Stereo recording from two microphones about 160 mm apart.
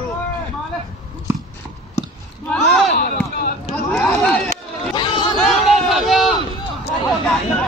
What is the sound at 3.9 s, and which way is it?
Speech, 10° left (ahead or behind).